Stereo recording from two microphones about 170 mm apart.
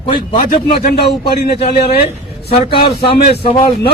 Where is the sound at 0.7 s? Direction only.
65° left (ahead or behind).